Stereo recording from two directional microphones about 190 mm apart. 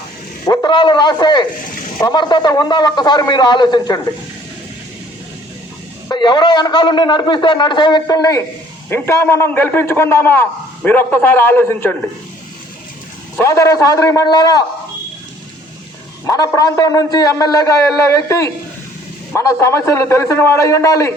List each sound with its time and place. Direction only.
0.4 s a man's voice: 20° left (ahead or behind)
6.1 s a man's voice: 20° left (ahead or behind)
13.3 s a man's voice: 15° left (ahead or behind)
16.2 s a man's voice: 15° left (ahead or behind)